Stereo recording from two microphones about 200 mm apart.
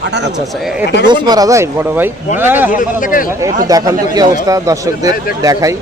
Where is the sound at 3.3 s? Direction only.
15° right (ahead or behind).